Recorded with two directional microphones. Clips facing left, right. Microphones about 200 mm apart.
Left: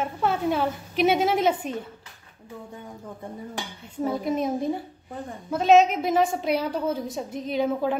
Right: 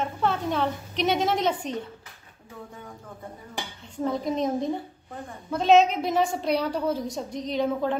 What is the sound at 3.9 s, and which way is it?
A woman's voice, 5° left (ahead or behind).